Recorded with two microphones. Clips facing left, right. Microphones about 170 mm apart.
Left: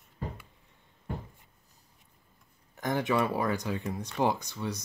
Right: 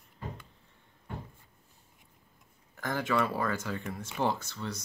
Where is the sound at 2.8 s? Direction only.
20° left (ahead or behind).